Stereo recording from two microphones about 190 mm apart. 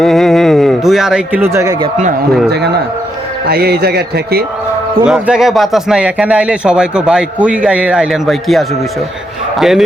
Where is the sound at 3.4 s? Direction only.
55° right (ahead or behind).